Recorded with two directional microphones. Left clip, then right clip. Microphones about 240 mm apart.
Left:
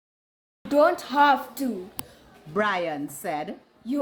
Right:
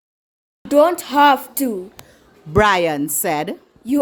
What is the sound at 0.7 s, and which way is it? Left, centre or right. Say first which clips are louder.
A woman's voice: right 6 dB; right.